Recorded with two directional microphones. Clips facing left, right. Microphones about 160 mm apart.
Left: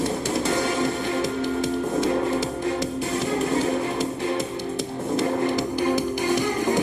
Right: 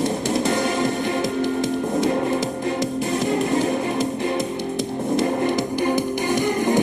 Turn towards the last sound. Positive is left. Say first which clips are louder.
# right 3 dB
turn(degrees=-20)  # may be behind; listen again after turning